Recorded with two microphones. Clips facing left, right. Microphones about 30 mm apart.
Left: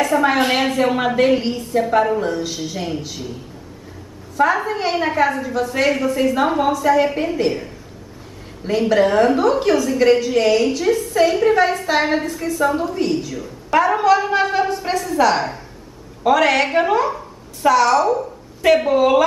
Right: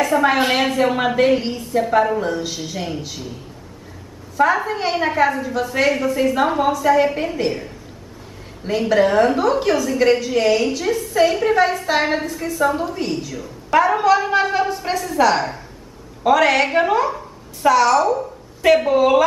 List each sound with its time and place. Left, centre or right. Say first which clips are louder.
0.0 s a woman's voice: even; centre
4.4 s a woman's voice: even; centre